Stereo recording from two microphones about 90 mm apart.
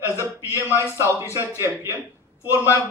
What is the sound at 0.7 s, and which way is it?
Speech, 35° right (ahead or behind).